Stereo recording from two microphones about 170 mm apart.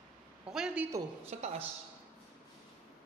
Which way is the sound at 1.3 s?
40° right (ahead or behind).